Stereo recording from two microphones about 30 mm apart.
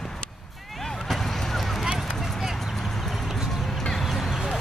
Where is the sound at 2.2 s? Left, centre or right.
Centre.